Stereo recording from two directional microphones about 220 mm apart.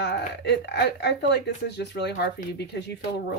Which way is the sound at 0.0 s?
50° left (ahead or behind).